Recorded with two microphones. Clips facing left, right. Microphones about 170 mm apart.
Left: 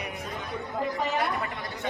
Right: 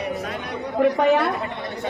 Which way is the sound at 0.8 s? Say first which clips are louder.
Right 12 dB; 65° right (ahead or behind).